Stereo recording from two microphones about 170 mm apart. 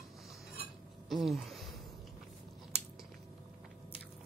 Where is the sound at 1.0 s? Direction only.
Centre (ahead or behind).